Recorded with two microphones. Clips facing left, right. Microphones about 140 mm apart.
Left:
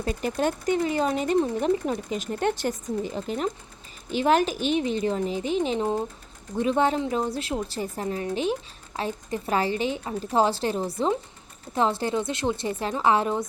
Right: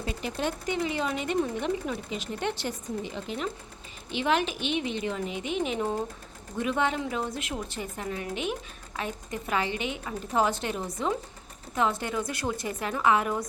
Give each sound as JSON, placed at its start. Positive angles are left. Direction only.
{"t": 0.0, "sound": "a woman's voice", "side_deg": 45}